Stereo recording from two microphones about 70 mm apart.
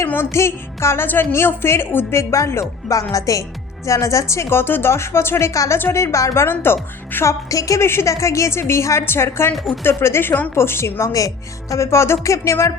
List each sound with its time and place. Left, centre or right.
0.3 s a woman's voice: left
5.5 s music: left
5.8 s a woman's voice: left
7.5 s a woman's voice: left
7.8 s a woman's voice: left
10.5 s a woman's voice: left
11.7 s music: left